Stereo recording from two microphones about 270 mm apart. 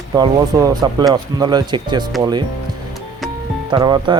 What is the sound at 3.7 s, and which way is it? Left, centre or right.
Speech, centre.